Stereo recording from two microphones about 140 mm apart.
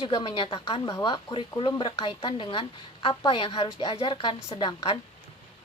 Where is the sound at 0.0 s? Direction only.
35° left (ahead or behind).